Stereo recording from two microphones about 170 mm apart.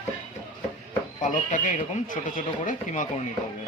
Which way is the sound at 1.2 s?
45° left (ahead or behind).